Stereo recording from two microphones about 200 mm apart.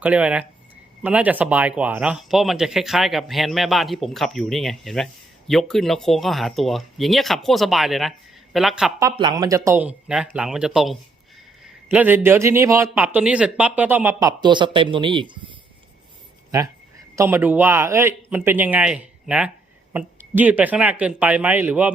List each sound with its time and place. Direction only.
0.0 s speech: 5° right (ahead or behind)
9.0 s a man's voice: 20° right (ahead or behind)
16.5 s speech: 20° right (ahead or behind)